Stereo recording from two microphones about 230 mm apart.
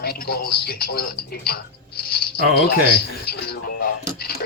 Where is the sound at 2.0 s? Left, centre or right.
Left.